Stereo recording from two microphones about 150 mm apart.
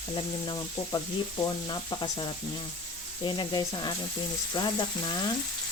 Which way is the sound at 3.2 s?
30° left (ahead or behind).